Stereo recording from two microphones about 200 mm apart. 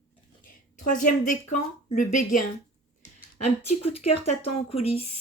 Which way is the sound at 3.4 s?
30° left (ahead or behind).